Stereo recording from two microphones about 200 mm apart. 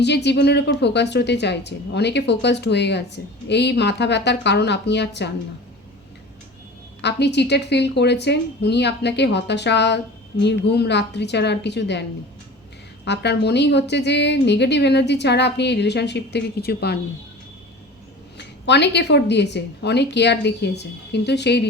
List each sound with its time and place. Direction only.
0.0 s a woman's voice: 60° left (ahead or behind)
7.0 s a woman's voice: 55° left (ahead or behind)
13.1 s a woman's voice: 60° left (ahead or behind)
18.3 s a woman's voice: 60° left (ahead or behind)